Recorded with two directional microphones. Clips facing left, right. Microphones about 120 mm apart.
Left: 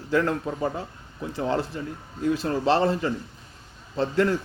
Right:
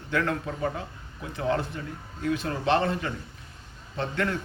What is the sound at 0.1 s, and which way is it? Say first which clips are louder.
A man's voice: left 4 dB; 30° left (ahead or behind).